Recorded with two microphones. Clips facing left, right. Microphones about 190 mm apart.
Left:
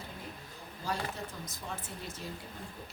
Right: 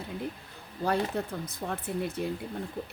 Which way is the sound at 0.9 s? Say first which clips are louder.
Right 9 dB; 60° right (ahead or behind).